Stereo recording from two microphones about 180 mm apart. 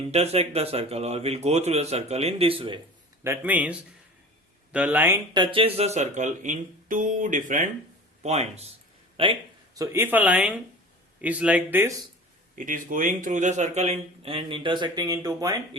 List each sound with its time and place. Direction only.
0.0 s speech: 35° right (ahead or behind)
3.2 s speech: 10° right (ahead or behind)
5.3 s speech: 25° right (ahead or behind); by 11.9 s 10° right (ahead or behind)
12.5 s speech: 50° right (ahead or behind); by 15.5 s 20° right (ahead or behind)